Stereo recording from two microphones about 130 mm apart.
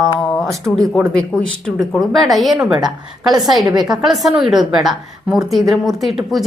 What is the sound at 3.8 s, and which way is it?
A woman's voice, centre (ahead or behind).